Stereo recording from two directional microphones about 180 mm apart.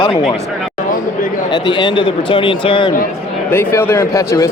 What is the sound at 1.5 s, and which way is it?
Speech, 25° left (ahead or behind).